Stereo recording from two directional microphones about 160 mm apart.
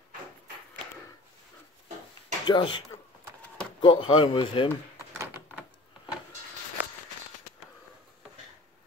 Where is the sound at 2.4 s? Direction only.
30° left (ahead or behind).